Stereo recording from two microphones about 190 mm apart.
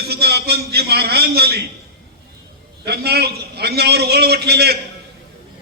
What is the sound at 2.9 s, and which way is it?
A man's voice, 60° right (ahead or behind).